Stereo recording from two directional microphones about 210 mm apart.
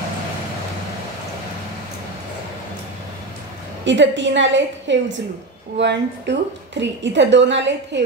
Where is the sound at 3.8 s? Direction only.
60° right (ahead or behind).